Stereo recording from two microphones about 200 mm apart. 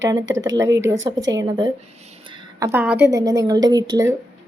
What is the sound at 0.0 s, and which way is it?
Speech, 20° right (ahead or behind).